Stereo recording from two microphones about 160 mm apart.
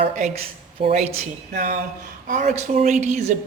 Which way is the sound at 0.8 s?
40° right (ahead or behind).